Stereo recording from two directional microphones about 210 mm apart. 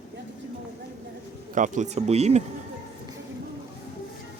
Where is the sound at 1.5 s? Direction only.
35° right (ahead or behind).